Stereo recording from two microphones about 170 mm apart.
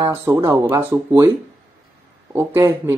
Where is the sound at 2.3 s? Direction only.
15° right (ahead or behind).